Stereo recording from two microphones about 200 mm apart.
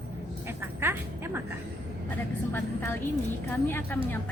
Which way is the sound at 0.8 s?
10° right (ahead or behind).